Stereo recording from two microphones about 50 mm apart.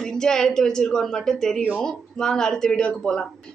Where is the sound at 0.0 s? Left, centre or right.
Centre.